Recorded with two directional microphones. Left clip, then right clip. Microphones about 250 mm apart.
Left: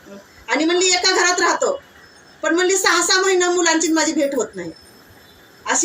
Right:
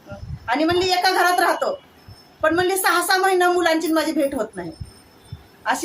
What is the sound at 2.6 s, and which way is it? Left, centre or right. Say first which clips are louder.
A woman's voice: left 6 dB; centre.